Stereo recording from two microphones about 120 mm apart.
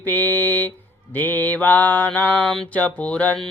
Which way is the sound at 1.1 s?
15° left (ahead or behind).